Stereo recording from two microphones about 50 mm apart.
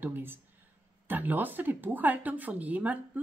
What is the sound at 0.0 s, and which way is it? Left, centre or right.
Speech, right.